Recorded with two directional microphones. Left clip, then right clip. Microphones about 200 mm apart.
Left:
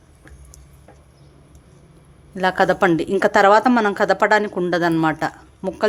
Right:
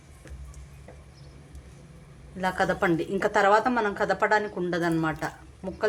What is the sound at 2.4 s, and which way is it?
A woman's voice, 50° left (ahead or behind).